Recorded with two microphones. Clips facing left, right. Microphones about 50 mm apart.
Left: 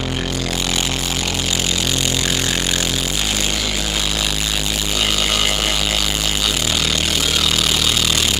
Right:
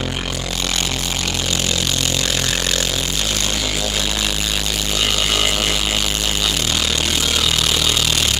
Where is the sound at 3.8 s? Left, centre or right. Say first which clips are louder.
Even; centre.